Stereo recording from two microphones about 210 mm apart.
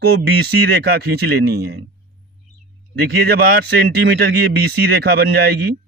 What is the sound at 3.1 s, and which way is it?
Speech, 50° right (ahead or behind).